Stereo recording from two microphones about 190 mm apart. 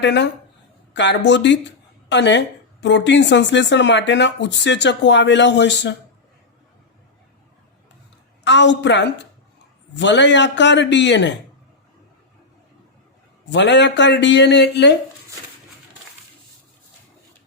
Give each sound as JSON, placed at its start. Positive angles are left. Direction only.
{"t": 0.0, "sound": "speech", "side_deg": 65}
{"t": 8.4, "sound": "speech", "side_deg": 70}
{"t": 13.5, "sound": "speech", "side_deg": 70}